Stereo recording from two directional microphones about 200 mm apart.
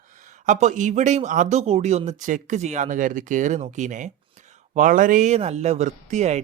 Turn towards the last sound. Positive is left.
turn(degrees=-35)  # may be behind; listen again after turning